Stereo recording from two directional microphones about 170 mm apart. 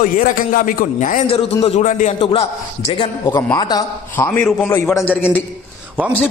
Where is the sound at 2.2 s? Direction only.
35° left (ahead or behind).